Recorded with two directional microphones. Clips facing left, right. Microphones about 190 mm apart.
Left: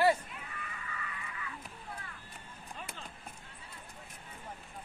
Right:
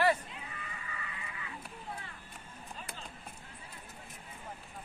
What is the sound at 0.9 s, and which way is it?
Music, 25° right (ahead or behind).